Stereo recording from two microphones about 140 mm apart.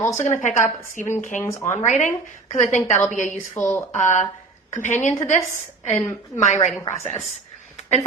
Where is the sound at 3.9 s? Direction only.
65° left (ahead or behind).